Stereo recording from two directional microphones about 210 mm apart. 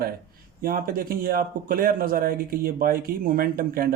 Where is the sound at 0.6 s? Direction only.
45° right (ahead or behind).